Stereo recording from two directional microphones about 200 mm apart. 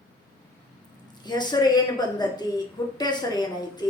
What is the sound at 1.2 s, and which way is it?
A woman's voice, 20° left (ahead or behind).